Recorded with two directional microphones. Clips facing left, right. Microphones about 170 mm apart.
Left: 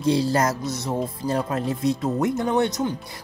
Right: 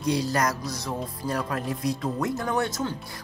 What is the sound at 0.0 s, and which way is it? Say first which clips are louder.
Speech: left 4 dB; 25° left (ahead or behind).